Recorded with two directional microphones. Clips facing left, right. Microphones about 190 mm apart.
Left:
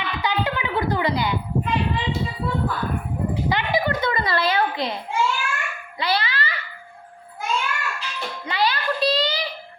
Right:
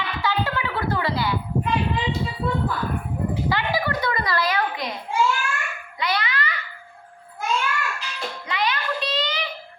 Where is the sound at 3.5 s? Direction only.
20° left (ahead or behind).